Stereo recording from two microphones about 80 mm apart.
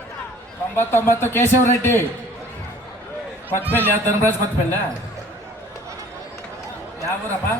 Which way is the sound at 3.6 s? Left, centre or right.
Right.